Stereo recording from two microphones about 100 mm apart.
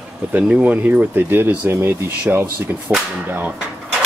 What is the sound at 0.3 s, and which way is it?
Speech, 15° right (ahead or behind).